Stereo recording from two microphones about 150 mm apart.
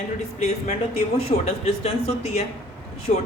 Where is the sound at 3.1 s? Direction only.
55° left (ahead or behind).